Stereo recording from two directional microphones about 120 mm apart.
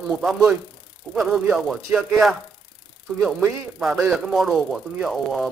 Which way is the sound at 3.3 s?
20° right (ahead or behind).